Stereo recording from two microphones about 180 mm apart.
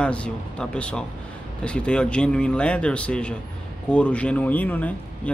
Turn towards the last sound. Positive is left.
turn(degrees=10)  # may be behind; listen again after turning